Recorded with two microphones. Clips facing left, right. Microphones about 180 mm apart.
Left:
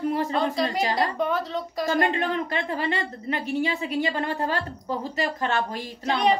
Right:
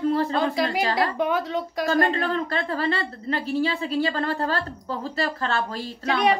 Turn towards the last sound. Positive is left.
turn(degrees=15)  # may be behind; listen again after turning